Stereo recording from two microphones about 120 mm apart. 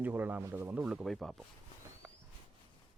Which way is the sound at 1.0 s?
Centre (ahead or behind).